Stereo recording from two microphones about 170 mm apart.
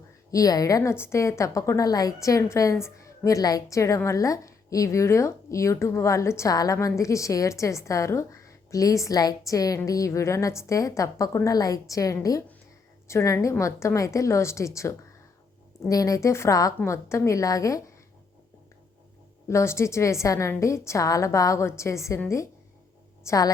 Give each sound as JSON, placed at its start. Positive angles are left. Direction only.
{"t": 0.3, "sound": "a woman's voice", "side_deg": 20}
{"t": 19.5, "sound": "a woman's voice", "side_deg": 15}